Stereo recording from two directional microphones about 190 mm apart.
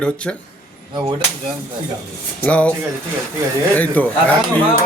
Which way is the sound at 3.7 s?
10° left (ahead or behind).